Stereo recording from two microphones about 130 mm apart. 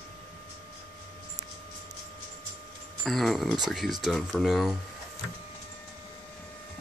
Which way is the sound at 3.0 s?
Centre (ahead or behind).